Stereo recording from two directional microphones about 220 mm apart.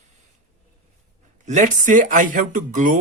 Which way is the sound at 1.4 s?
35° right (ahead or behind).